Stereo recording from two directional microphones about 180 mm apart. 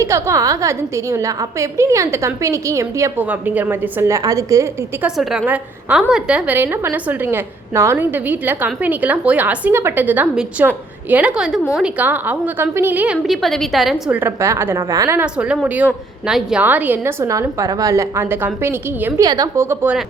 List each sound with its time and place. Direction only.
0.0 s a woman's voice: 15° right (ahead or behind)
5.0 s a woman's voice: centre (ahead or behind)
14.2 s a woman's voice: 15° right (ahead or behind)